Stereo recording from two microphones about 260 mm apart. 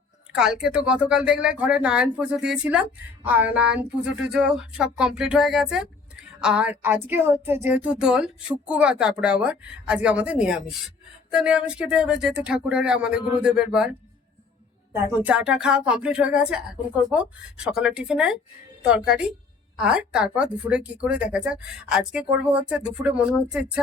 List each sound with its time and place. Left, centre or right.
0.3 s speech: centre
15.1 s speech: centre